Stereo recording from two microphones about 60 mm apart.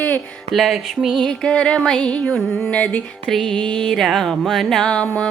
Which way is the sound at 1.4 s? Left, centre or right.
Centre.